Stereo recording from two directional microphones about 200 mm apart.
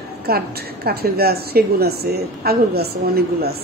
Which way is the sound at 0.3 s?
50° right (ahead or behind).